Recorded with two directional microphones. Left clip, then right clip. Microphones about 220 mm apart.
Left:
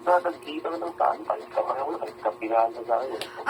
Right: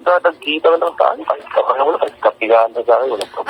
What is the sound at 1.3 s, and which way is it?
A man's voice, 60° right (ahead or behind).